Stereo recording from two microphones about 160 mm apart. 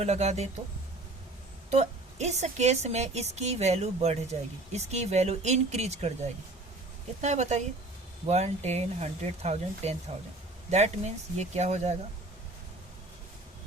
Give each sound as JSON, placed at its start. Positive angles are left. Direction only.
{"t": 0.0, "sound": "a woman's voice", "side_deg": -45}
{"t": 1.7, "sound": "a woman's voice", "side_deg": -45}
{"t": 7.2, "sound": "a woman's voice", "side_deg": -45}